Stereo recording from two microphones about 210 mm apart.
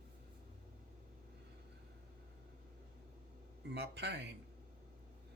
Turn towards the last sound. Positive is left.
turn(degrees=-55)  # may be behind; listen again after turning